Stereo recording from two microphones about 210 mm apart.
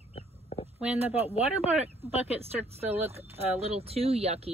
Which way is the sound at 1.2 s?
30° left (ahead or behind).